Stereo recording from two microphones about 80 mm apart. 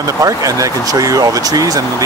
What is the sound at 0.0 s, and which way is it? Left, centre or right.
Speech, right.